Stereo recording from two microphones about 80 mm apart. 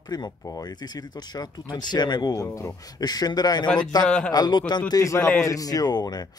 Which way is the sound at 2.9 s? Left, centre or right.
Left.